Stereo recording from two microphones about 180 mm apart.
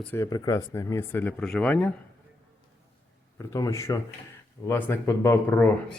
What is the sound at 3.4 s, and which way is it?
Speech, 15° left (ahead or behind).